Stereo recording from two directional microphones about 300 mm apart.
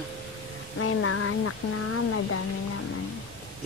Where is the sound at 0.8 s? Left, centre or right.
Left.